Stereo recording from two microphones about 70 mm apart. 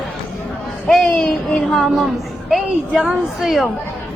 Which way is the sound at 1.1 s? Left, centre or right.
Centre.